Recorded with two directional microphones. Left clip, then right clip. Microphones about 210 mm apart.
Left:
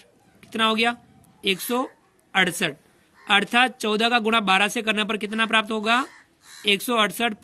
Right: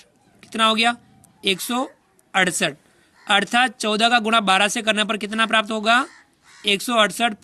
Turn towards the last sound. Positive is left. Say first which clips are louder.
# right 3 dB
turn(degrees=-25)  # may be behind; listen again after turning